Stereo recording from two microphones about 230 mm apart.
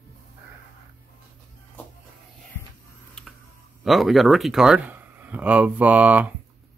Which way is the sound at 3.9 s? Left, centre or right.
Centre.